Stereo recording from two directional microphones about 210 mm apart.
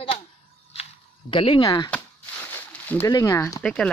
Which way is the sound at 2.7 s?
10° left (ahead or behind).